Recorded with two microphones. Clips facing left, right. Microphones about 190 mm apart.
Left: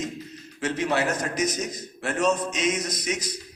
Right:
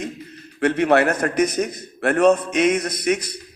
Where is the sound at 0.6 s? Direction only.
60° right (ahead or behind).